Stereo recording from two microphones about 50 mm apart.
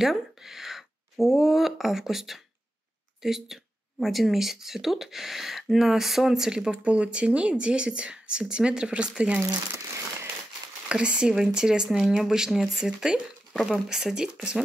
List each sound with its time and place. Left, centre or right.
0.0 s speech: centre
10.9 s speech: right
13.5 s speech: centre
13.8 s speech: centre